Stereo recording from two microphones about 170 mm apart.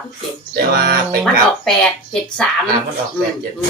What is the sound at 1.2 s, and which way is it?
Speech, centre (ahead or behind).